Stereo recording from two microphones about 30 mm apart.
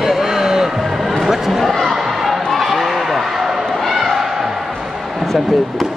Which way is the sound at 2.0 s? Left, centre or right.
Centre.